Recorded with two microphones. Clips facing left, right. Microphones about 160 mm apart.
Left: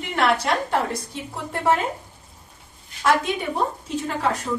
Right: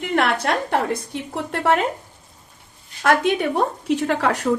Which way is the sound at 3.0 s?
65° right (ahead or behind).